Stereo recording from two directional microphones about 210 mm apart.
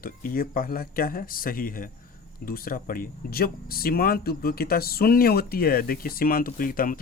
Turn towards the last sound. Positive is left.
turn(degrees=40)  # may be behind; listen again after turning